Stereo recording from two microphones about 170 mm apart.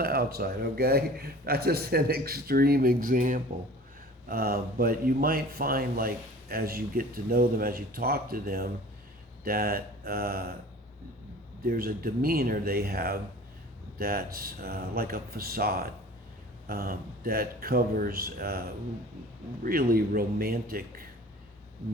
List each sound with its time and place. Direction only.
0.0 s speech: 65° right (ahead or behind)
4.3 s speech: 65° right (ahead or behind)
11.6 s speech: 60° right (ahead or behind)
19.6 s speech: 60° right (ahead or behind)